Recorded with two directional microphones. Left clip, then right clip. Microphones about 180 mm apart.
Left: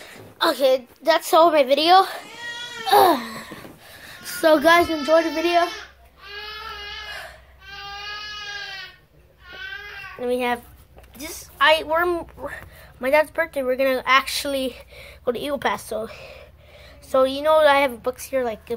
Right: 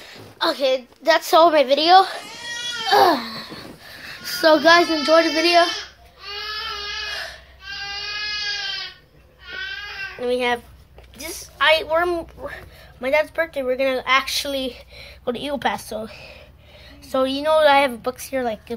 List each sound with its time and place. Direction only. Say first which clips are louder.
0.0 s a sound: left 1 dB; 35° left (ahead or behind)
1.0 s a woman's voice: right 2 dB; 10° left (ahead or behind)
2.8 s babbling: even; 15° left (ahead or behind)
3.8 s a sound: right 5 dB; 5° left (ahead or behind)
4.6 s speech: right 2 dB; 20° left (ahead or behind)
5.0 s speech: right 3 dB; centre (ahead or behind)
10.2 s a woman's voice: right 2 dB; 10° left (ahead or behind)